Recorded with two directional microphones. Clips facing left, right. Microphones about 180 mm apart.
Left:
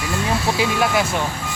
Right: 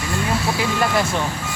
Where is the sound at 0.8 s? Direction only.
5° left (ahead or behind).